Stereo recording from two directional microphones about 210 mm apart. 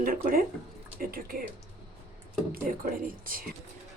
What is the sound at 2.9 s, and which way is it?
Speech, 40° right (ahead or behind).